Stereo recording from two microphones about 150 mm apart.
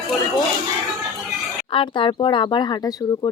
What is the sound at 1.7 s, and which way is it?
Speech, 35° left (ahead or behind).